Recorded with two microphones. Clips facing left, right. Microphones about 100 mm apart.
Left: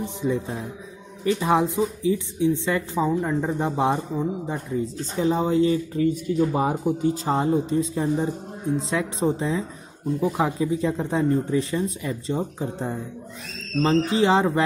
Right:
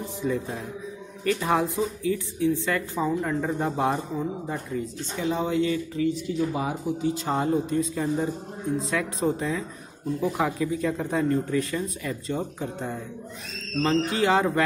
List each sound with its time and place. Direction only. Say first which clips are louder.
0.0 s speech: left 2 dB; 20° left (ahead or behind)
4.9 s speech: left 5 dB; 35° left (ahead or behind)
7.2 s speech: left 2 dB; 30° left (ahead or behind)